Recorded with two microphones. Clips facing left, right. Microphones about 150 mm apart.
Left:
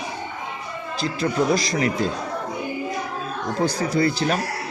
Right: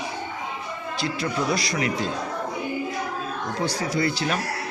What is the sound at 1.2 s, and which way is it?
Speech, 40° left (ahead or behind).